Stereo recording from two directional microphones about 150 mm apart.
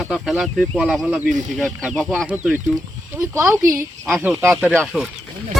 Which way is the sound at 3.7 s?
15° right (ahead or behind).